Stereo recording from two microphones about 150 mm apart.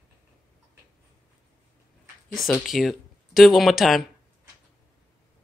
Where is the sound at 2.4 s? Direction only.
Centre (ahead or behind).